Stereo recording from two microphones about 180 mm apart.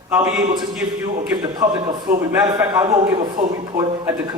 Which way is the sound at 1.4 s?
20° right (ahead or behind).